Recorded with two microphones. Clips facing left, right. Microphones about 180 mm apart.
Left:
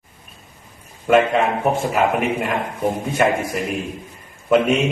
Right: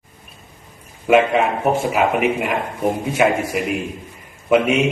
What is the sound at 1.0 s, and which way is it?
A man's voice, 5° right (ahead or behind).